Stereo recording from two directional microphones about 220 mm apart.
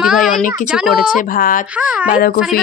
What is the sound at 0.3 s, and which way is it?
Speech, 40° left (ahead or behind).